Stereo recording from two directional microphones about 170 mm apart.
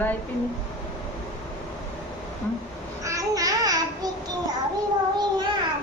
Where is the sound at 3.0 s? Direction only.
20° right (ahead or behind).